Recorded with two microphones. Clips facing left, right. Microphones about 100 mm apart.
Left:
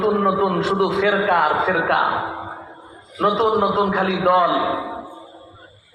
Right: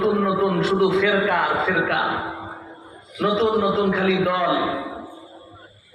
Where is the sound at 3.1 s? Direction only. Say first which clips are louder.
Left 2 dB; 35° left (ahead or behind).